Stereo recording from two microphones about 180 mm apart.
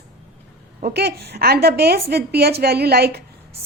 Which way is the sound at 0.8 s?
55° right (ahead or behind).